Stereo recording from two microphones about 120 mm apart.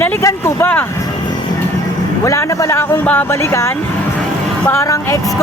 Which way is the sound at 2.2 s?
25° left (ahead or behind).